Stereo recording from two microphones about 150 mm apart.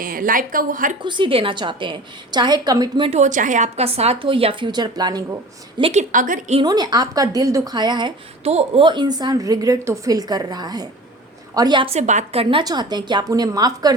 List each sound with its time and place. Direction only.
0.0 s a woman's voice: 70° right (ahead or behind)
1.0 s a woman's voice: 35° right (ahead or behind)
3.1 s a woman's voice: 55° right (ahead or behind); by 5.2 s 25° right (ahead or behind)
5.9 s a woman's voice: 55° right (ahead or behind)
6.6 s a woman's voice: 25° right (ahead or behind)
8.4 s a woman's voice: 40° right (ahead or behind)
11.9 s a woman's voice: 50° right (ahead or behind); by 13.9 s 25° right (ahead or behind)